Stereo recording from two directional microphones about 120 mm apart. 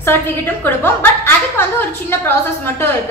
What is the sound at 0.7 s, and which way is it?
A woman's voice, 20° left (ahead or behind).